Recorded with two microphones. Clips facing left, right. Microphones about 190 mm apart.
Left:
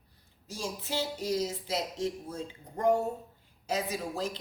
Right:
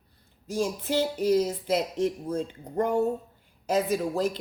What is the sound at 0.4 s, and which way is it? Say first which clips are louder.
A woman's voice: right 10 dB; 55° right (ahead or behind).